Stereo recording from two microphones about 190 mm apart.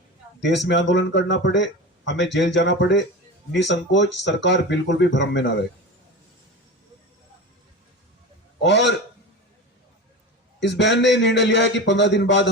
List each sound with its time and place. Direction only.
0.3 s speech: 65° left (ahead or behind)
8.6 s speech: 65° left (ahead or behind)
10.6 s speech: 70° left (ahead or behind)